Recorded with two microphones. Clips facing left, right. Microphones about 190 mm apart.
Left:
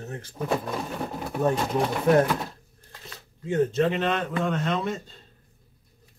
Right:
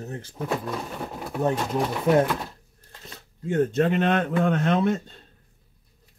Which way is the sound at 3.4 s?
50° right (ahead or behind).